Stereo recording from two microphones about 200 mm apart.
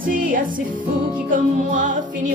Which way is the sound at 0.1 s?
45° right (ahead or behind).